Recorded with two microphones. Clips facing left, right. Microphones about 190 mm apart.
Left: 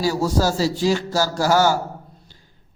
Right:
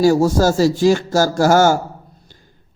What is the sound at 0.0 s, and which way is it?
A man's voice, 50° right (ahead or behind).